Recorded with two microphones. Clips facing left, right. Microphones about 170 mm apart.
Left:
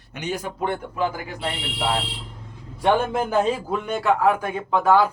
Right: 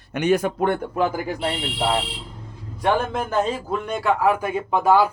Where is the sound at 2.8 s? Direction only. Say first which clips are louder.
Left 1 dB; 5° left (ahead or behind).